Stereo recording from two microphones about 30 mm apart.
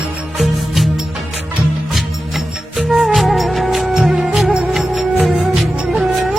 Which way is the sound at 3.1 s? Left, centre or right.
Centre.